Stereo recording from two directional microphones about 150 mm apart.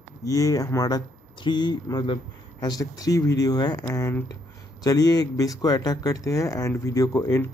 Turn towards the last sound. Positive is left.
turn(degrees=20)  # may be behind; listen again after turning